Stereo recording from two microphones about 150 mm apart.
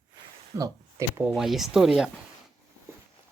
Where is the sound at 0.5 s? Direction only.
20° right (ahead or behind).